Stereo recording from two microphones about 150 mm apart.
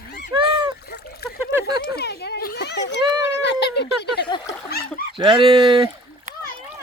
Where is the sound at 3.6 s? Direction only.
90° left.